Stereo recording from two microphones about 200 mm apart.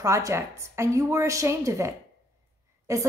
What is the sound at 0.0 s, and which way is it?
A woman's voice, 15° right (ahead or behind).